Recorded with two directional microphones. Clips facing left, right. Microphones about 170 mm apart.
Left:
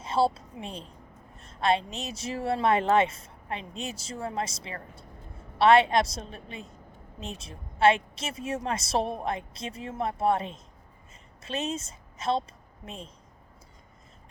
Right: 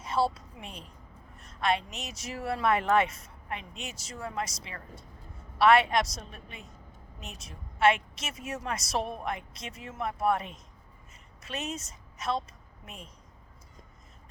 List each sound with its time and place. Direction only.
0.0 s a woman's voice: 25° left (ahead or behind)